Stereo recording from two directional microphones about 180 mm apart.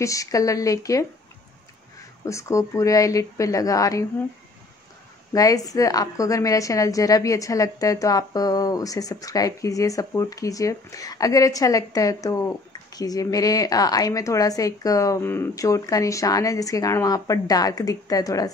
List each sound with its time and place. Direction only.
0.0 s a woman's voice: 20° left (ahead or behind)
2.2 s speech: 15° left (ahead or behind)
5.3 s a woman's voice: 20° left (ahead or behind)